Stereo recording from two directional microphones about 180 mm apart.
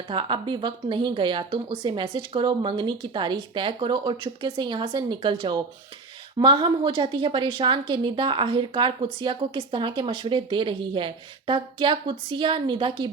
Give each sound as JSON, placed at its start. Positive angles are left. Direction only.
{"t": 0.1, "sound": "a woman's voice", "side_deg": -25}